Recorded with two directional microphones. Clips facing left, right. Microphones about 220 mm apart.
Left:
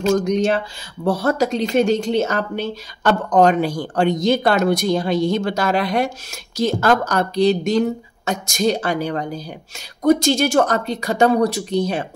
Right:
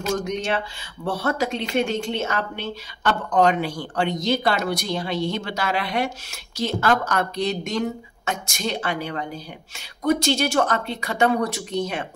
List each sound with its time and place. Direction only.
0.0 s a woman's voice: 35° left (ahead or behind)